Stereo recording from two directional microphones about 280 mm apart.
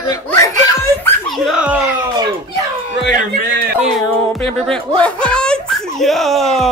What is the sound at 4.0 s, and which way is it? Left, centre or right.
Music, centre.